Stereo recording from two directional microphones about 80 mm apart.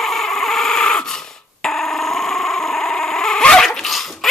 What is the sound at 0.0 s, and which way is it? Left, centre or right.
Dog, centre.